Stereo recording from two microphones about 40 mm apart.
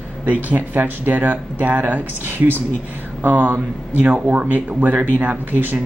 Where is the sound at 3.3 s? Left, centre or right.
Right.